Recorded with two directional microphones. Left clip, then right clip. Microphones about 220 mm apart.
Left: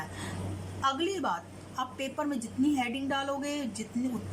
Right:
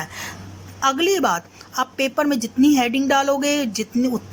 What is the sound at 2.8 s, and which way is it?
Speech, 55° right (ahead or behind).